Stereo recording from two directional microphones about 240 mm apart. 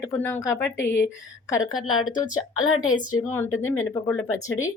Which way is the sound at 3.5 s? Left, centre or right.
Left.